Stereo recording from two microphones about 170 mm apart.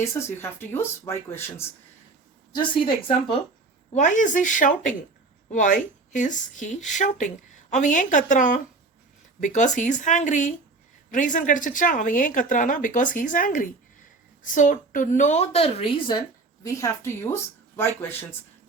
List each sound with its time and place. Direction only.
0.0 s speech: 15° left (ahead or behind)
2.5 s a woman's voice: 30° left (ahead or behind)
3.9 s a woman's voice: 45° left (ahead or behind); by 16.2 s 30° left (ahead or behind)
16.6 s speech: 20° left (ahead or behind)